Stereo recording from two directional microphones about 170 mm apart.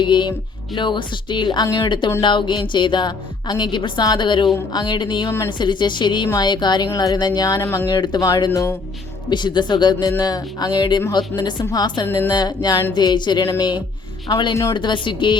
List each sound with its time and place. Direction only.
0.0 s speech: 25° left (ahead or behind)